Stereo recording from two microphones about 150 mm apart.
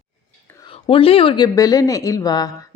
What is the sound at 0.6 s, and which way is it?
Speech, 35° left (ahead or behind).